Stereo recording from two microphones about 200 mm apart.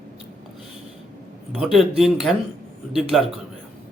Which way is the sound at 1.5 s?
Centre (ahead or behind).